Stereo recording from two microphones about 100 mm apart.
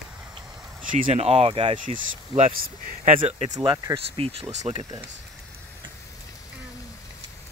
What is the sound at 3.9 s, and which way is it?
Speech, 75° right (ahead or behind).